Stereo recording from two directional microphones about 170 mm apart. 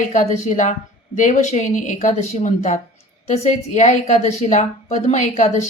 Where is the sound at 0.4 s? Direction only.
45° left (ahead or behind).